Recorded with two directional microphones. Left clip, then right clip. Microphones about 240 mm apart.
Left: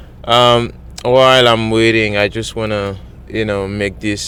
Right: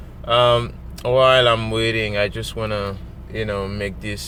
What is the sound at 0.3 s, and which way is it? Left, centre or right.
Speech, left.